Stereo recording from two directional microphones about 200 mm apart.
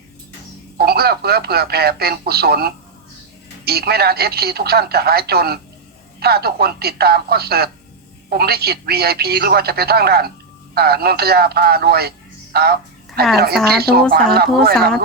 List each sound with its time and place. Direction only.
0.8 s a man's voice: 50° right (ahead or behind)